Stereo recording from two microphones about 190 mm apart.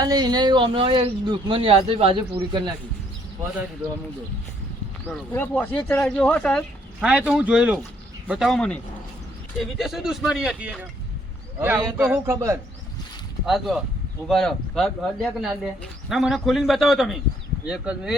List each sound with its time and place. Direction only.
0.0 s speech: 20° right (ahead or behind)
5.0 s a man's voice: 10° left (ahead or behind); by 12.5 s 15° right (ahead or behind)
13.4 s speech: centre (ahead or behind)